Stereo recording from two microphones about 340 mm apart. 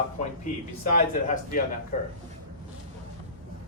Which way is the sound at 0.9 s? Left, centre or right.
Left.